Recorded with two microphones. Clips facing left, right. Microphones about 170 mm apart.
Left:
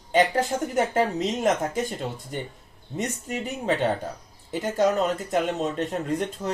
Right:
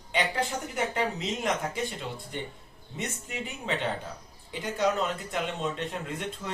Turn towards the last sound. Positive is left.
turn(degrees=40)  # may be behind; listen again after turning